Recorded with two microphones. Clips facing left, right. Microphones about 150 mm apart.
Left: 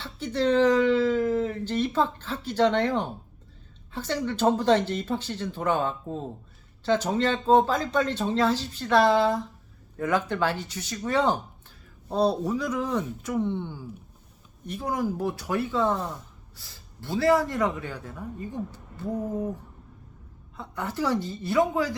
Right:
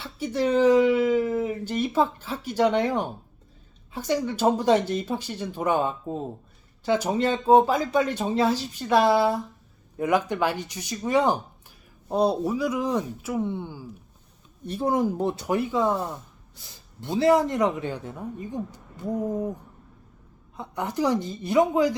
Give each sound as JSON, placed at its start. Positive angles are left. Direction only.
{"t": 0.0, "sound": "speech", "side_deg": -10}
{"t": 14.7, "sound": "a man's voice", "side_deg": -30}
{"t": 20.6, "sound": "a man's voice", "side_deg": -20}